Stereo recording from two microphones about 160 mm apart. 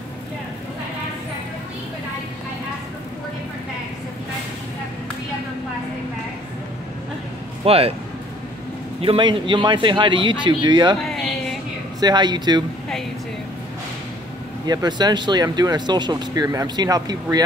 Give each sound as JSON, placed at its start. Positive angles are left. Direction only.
{"t": 7.6, "sound": "speech", "side_deg": -35}
{"t": 9.0, "sound": "speech", "side_deg": -35}
{"t": 11.1, "sound": "a sound", "side_deg": 5}
{"t": 12.0, "sound": "speech", "side_deg": -25}
{"t": 14.7, "sound": "speech", "side_deg": -25}